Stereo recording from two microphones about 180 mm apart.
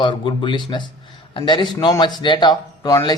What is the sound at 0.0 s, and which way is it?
Speech, 25° left (ahead or behind).